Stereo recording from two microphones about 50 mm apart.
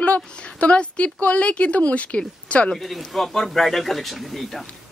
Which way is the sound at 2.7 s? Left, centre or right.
Centre.